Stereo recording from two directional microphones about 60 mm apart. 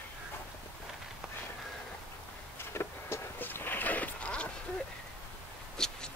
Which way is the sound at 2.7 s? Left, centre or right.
Left.